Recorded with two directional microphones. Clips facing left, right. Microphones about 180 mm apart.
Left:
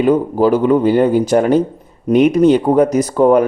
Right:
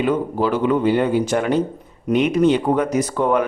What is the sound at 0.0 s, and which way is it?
Speech, 40° left (ahead or behind).